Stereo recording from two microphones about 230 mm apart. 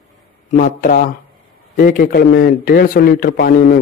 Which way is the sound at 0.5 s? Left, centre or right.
Left.